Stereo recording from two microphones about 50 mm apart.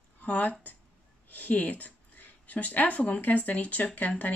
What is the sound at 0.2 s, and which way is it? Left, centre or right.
Speech, left.